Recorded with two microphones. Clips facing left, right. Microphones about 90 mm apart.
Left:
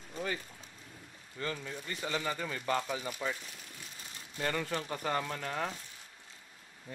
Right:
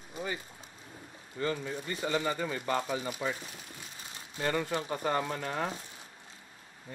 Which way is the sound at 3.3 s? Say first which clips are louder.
Right 4 dB; 30° right (ahead or behind).